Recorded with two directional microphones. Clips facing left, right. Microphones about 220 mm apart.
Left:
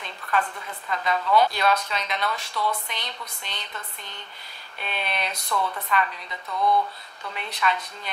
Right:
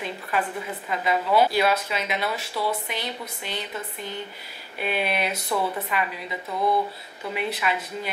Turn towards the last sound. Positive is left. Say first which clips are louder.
# right 2 dB
turn(degrees=-5)  # may be behind; listen again after turning